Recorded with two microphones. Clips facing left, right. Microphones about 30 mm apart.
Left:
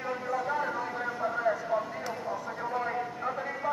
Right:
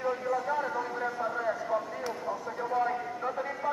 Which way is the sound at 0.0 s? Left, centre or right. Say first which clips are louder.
Right 2 dB; centre.